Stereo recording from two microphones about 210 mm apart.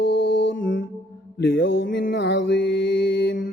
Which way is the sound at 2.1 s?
55° left (ahead or behind).